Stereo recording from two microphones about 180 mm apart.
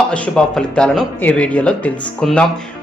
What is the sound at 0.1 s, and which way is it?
Speech, 5° left (ahead or behind).